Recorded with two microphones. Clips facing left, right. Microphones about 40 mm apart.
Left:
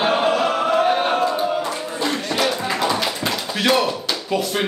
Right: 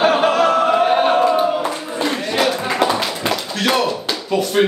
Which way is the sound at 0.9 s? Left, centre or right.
Right.